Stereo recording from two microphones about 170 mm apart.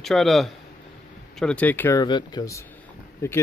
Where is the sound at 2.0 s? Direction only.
25° left (ahead or behind).